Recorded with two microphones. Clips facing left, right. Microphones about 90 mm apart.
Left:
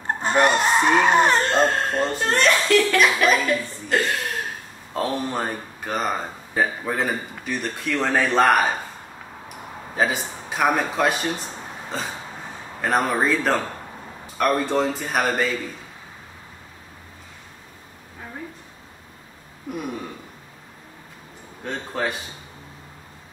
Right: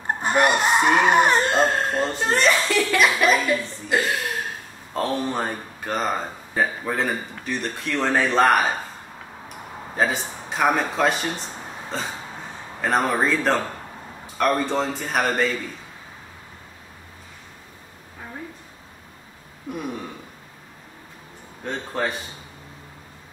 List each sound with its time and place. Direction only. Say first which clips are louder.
0.2 s speech: left 1 dB; 10° right (ahead or behind)
9.9 s speech: even; centre (ahead or behind)
19.7 s speech: even; 5° left (ahead or behind)
21.6 s speech: even; centre (ahead or behind)